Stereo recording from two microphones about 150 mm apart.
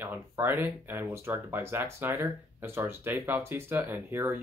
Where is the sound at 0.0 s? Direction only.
15° right (ahead or behind).